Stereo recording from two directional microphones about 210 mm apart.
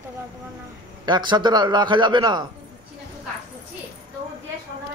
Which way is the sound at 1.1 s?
20° right (ahead or behind).